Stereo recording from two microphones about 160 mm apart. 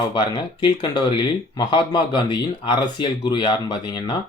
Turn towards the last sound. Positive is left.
turn(degrees=25)  # may be behind; listen again after turning